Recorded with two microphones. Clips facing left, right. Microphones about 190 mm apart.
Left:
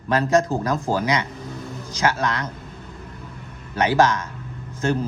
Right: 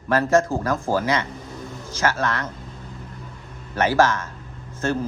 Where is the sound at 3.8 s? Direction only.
15° left (ahead or behind).